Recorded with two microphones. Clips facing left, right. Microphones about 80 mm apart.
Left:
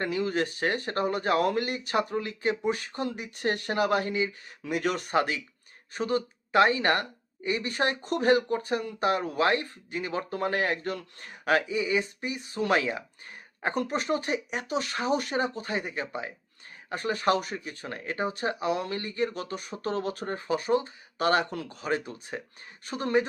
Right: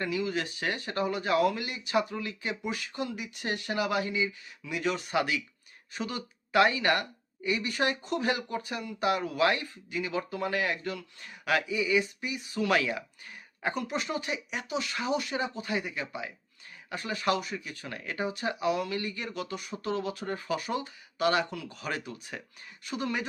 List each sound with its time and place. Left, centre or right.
0.0 s a woman's voice: left
21.8 s a woman's voice: left